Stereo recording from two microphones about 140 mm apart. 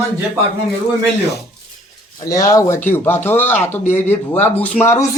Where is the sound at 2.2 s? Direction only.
25° left (ahead or behind).